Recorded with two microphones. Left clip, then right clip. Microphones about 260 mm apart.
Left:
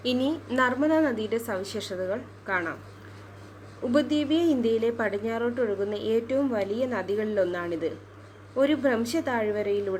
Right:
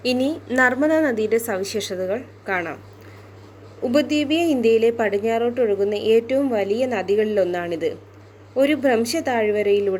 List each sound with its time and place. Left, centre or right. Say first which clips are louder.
0.5 s a woman's voice: right 6 dB; right
3.9 s a woman's voice: right 5 dB; right